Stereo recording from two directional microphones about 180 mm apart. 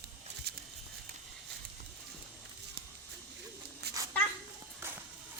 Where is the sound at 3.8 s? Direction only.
65° right (ahead or behind).